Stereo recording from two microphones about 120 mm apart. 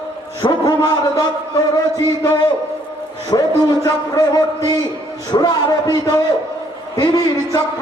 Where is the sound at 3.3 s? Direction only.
35° left (ahead or behind).